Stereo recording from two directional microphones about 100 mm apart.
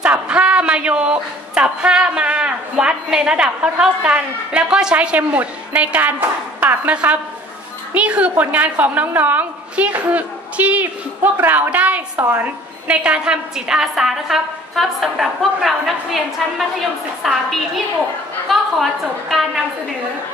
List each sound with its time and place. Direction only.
0.0 s a woman's voice: 10° right (ahead or behind)